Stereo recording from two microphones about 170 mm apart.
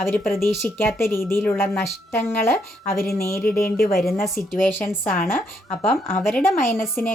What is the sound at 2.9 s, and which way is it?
Speech, 65° left (ahead or behind).